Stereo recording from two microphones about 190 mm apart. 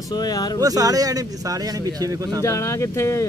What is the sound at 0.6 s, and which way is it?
Speech, 20° right (ahead or behind).